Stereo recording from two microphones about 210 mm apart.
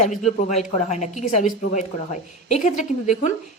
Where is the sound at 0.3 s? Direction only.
30° left (ahead or behind).